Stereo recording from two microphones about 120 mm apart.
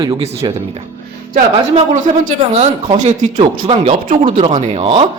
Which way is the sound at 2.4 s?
70° right (ahead or behind).